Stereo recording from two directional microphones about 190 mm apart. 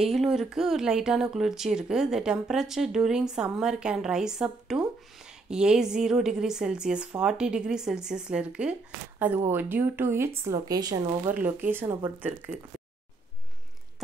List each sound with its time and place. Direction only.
0.0 s speech: centre (ahead or behind); by 11.1 s 20° right (ahead or behind)
11.2 s speech: 10° right (ahead or behind)